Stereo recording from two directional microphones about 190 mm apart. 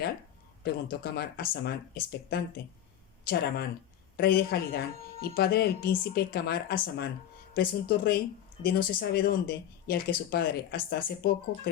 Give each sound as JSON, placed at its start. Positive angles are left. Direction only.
{"t": 0.6, "sound": "a woman's voice", "side_deg": 55}